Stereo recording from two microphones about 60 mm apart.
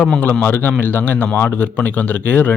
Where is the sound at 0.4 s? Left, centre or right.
Left.